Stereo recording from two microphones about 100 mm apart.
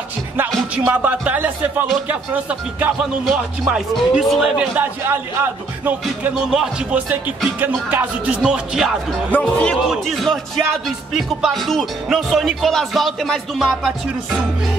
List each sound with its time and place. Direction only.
0.8 s speech: 15° right (ahead or behind)
3.3 s music: 5° right (ahead or behind)
4.6 s speech: 20° right (ahead or behind)
6.3 s speech: 5° right (ahead or behind)
7.6 s speech: 15° right (ahead or behind)
8.4 s music: 5° right (ahead or behind)
9.3 s speech: 10° left (ahead or behind)
9.8 s music: centre (ahead or behind)